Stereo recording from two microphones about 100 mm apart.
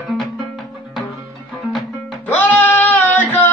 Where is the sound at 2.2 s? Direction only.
15° left (ahead or behind).